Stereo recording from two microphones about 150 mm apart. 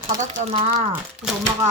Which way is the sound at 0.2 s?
55° right (ahead or behind).